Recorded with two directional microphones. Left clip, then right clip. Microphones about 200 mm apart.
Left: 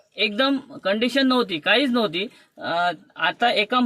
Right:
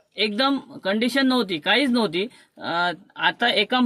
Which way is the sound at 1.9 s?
30° right (ahead or behind).